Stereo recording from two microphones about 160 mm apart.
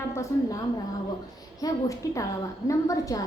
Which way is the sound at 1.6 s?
20° left (ahead or behind).